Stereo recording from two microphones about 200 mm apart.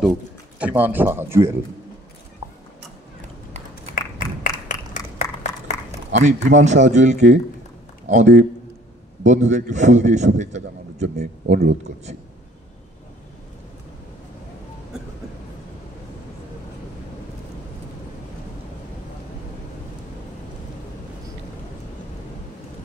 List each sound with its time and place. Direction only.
0.1 s a man's voice: 10° right (ahead or behind)
2.4 s tick-tock: 25° right (ahead or behind)
3.9 s a sound: 40° left (ahead or behind)
6.1 s a man's voice: 35° right (ahead or behind)
11.4 s speech: 55° right (ahead or behind)